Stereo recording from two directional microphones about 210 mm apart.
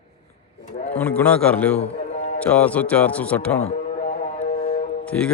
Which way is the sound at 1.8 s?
35° left (ahead or behind).